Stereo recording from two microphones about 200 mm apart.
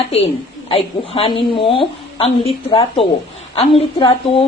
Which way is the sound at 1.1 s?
25° left (ahead or behind).